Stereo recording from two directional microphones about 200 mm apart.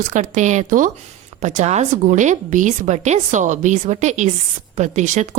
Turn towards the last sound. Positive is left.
turn(degrees=-35)  # may be behind; listen again after turning